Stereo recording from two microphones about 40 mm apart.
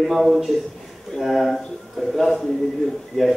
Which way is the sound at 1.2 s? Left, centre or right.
Centre.